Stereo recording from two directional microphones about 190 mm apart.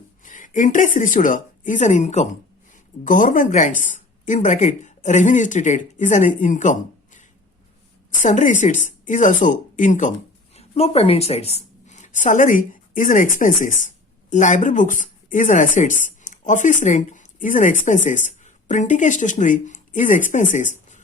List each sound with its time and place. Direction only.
0.2 s a woman's voice: 45° left (ahead or behind)